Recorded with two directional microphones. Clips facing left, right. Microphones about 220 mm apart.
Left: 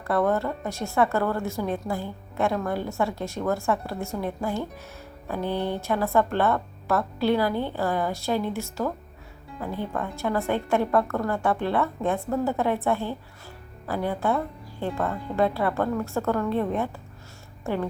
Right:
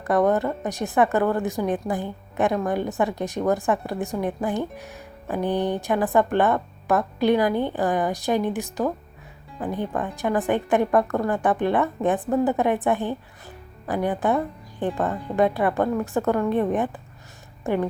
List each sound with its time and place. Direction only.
0.0 s a woman's voice: 15° right (ahead or behind)